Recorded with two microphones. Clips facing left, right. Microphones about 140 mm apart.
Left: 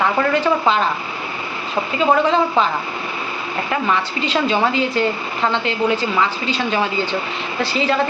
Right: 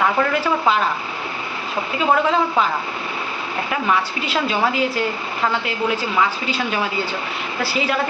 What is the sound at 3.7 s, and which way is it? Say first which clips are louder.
A woman's voice: left 1 dB; 5° right (ahead or behind).